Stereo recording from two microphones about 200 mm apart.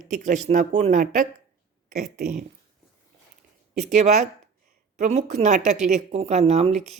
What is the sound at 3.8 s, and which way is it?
Speech, 35° right (ahead or behind).